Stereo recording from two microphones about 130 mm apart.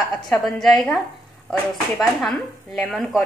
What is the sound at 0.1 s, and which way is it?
Speech, 5° left (ahead or behind).